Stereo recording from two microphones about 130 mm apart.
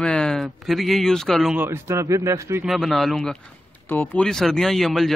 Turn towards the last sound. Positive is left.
turn(degrees=0)  # may be behind; listen again after turning